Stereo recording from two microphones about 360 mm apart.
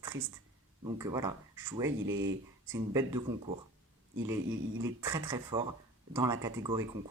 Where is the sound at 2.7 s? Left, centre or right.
Centre.